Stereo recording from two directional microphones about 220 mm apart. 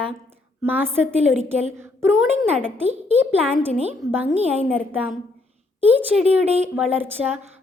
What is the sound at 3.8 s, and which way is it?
A woman's voice, 10° right (ahead or behind).